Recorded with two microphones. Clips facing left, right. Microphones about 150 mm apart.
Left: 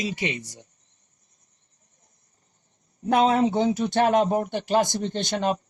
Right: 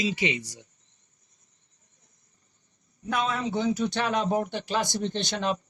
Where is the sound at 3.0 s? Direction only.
55° left (ahead or behind).